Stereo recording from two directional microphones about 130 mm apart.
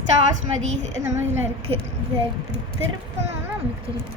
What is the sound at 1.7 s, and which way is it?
Speech, 50° right (ahead or behind).